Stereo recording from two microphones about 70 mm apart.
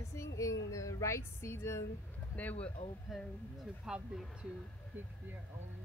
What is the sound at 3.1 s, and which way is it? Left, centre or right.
Speech, centre.